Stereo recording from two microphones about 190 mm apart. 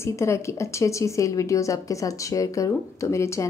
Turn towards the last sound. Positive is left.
turn(degrees=15)  # may be behind; listen again after turning